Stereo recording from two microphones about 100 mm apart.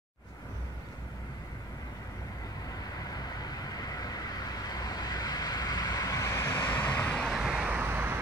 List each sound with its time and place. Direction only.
3.1 s vehicle: 40° left (ahead or behind); by 7.1 s 20° left (ahead or behind)
7.1 s vehicle: centre (ahead or behind); by 8.2 s 25° right (ahead or behind)